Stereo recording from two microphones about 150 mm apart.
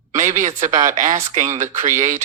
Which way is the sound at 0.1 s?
55° right (ahead or behind).